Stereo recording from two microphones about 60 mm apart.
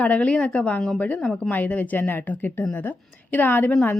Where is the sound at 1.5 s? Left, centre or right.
Left.